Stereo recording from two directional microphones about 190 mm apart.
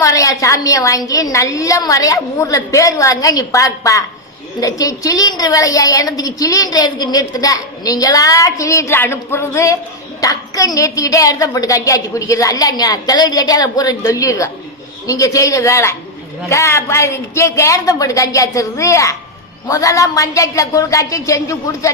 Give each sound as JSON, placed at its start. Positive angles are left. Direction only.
{"t": 0.0, "sound": "a woman's voice", "side_deg": 15}